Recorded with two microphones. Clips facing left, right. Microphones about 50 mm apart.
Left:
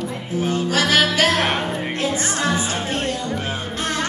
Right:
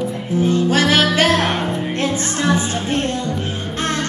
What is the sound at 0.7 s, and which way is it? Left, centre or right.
Music, right.